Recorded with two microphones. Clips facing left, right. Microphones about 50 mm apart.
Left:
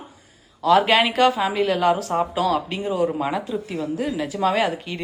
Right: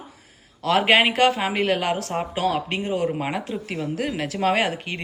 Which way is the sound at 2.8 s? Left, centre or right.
Right.